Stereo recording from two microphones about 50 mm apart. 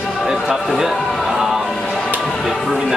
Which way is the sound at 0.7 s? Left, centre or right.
Centre.